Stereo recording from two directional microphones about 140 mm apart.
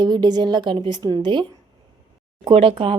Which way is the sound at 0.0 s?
30° right (ahead or behind).